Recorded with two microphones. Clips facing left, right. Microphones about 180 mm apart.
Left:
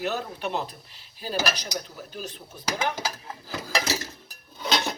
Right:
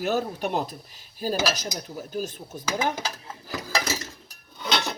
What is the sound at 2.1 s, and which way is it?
Speech, 45° right (ahead or behind).